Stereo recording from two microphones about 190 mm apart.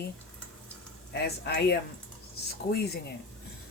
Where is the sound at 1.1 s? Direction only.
60° left (ahead or behind).